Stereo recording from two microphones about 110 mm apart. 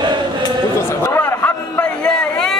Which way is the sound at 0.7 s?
25° left (ahead or behind).